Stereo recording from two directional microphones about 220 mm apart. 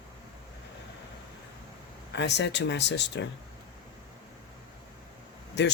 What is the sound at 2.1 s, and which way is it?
Speech, 50° left (ahead or behind).